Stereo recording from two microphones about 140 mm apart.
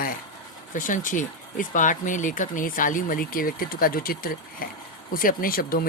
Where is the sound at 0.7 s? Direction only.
70° left (ahead or behind).